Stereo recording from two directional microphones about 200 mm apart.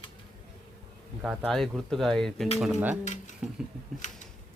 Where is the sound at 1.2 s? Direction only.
Centre (ahead or behind).